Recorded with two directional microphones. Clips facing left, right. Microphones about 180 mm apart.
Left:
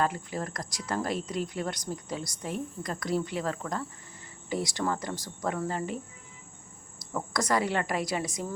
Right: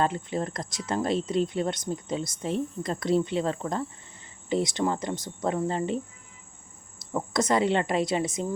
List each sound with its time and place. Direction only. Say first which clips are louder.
0.0 s speech: right 3 dB; 25° right (ahead or behind)
7.0 s speech: right 4 dB; 20° right (ahead or behind)